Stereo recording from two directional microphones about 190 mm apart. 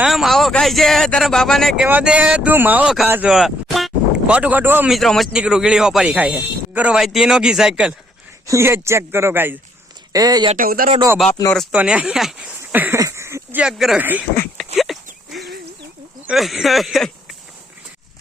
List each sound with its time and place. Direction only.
0.0 s speech: centre (ahead or behind)
4.9 s speech: centre (ahead or behind)
8.4 s speech: 15° right (ahead or behind)
10.5 s speech: 50° right (ahead or behind)
11.5 s speech: centre (ahead or behind)
14.8 s a sound: centre (ahead or behind)
16.2 s speech: centre (ahead or behind)